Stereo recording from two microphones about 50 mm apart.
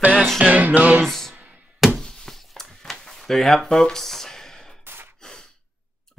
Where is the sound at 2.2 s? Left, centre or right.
Centre.